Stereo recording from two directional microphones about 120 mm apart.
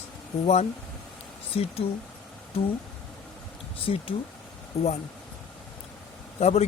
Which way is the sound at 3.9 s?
55° left (ahead or behind).